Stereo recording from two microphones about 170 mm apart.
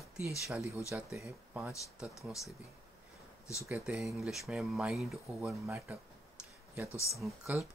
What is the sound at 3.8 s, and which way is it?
Speech, centre (ahead or behind).